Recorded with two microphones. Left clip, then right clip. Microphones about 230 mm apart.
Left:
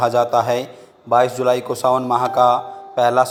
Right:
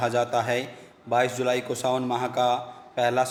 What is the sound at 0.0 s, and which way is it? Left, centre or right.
A man's voice, centre.